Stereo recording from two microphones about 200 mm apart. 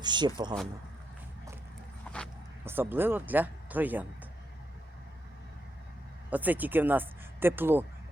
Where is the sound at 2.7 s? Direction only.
10° right (ahead or behind).